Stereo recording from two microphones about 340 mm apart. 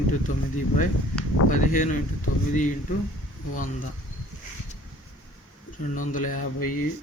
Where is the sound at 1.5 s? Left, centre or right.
Left.